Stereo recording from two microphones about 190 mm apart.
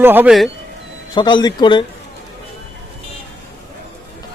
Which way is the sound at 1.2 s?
25° left (ahead or behind).